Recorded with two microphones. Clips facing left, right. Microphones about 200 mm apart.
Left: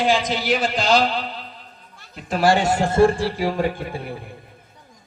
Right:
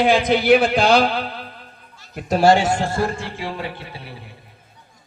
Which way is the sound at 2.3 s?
30° right (ahead or behind).